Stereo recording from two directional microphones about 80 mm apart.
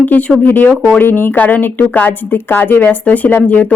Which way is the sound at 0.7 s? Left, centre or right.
Centre.